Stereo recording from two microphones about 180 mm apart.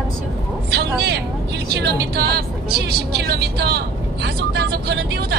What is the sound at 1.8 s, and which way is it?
Speech, 65° right (ahead or behind).